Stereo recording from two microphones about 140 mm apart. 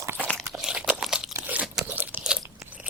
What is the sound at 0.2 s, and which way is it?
Crunch, 5° left (ahead or behind).